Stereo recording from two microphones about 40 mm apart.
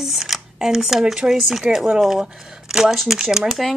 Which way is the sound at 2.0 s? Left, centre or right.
Centre.